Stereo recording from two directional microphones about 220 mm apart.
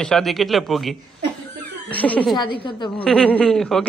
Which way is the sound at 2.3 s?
20° left (ahead or behind).